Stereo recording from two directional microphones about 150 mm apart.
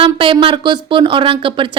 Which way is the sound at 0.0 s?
35° right (ahead or behind).